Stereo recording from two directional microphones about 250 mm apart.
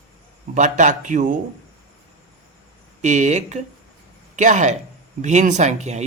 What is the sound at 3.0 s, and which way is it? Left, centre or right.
Speech, right.